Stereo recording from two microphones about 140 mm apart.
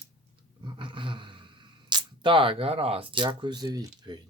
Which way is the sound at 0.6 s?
35° right (ahead or behind).